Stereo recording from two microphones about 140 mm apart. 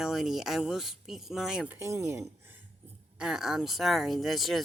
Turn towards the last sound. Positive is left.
turn(degrees=0)  # may be behind; listen again after turning